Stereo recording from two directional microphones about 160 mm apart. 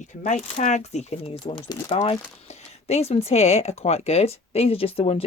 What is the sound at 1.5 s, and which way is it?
Speech, 35° left (ahead or behind).